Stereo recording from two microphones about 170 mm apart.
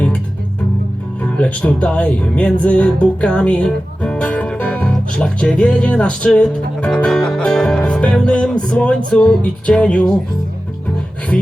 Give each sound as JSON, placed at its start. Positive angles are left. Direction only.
{"t": 1.2, "sound": "speech", "side_deg": 5}
{"t": 9.0, "sound": "music", "side_deg": 5}